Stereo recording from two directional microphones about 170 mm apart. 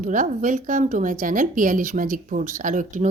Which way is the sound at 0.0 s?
50° right (ahead or behind).